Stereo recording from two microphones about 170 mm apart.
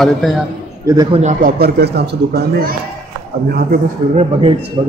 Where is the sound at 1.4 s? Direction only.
65° right (ahead or behind).